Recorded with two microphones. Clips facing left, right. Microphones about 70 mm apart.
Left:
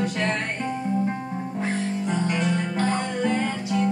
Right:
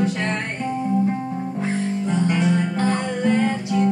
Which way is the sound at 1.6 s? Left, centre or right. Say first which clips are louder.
Right 2 dB; centre.